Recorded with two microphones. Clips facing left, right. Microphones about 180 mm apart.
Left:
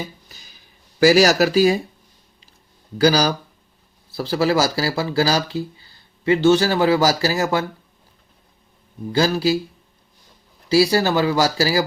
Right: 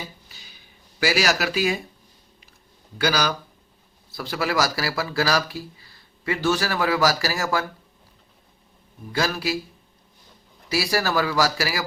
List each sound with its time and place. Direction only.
0.3 s a sound: 45° left (ahead or behind)
0.9 s speech: 40° left (ahead or behind)
3.0 s speech: 35° left (ahead or behind)
9.1 s speech: 30° left (ahead or behind)
10.7 s speech: 25° left (ahead or behind)